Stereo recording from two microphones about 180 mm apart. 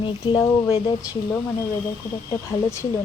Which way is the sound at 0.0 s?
25° left (ahead or behind).